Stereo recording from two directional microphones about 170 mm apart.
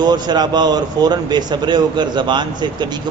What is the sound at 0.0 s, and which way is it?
A man's voice, 25° right (ahead or behind).